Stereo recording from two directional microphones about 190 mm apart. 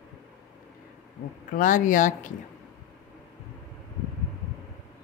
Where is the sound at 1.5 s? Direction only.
45° left (ahead or behind).